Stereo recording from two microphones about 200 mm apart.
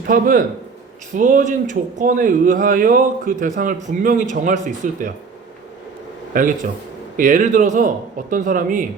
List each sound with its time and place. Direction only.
0.1 s a man's voice: 45° right (ahead or behind)
6.3 s a man's voice: 40° right (ahead or behind)